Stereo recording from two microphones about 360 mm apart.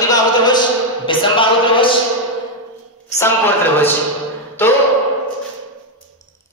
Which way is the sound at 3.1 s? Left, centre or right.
Centre.